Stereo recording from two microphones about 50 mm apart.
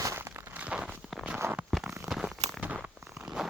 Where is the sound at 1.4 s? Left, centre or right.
Right.